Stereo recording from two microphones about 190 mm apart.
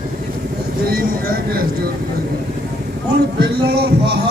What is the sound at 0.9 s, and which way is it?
Speech, 50° right (ahead or behind).